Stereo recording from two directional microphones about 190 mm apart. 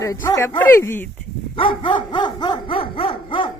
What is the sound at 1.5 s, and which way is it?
Dog, 25° left (ahead or behind).